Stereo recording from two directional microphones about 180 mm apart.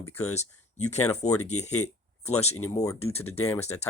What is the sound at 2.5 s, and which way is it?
Speech, 20° left (ahead or behind).